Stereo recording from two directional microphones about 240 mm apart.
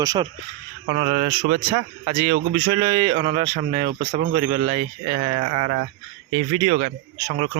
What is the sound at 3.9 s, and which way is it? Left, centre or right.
Speech, right.